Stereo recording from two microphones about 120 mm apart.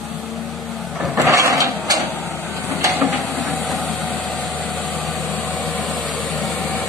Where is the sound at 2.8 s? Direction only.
20° right (ahead or behind).